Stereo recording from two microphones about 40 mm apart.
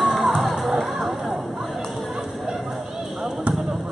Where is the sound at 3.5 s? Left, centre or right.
Centre.